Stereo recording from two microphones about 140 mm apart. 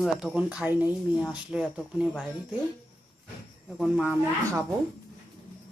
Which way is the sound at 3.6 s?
5° right (ahead or behind).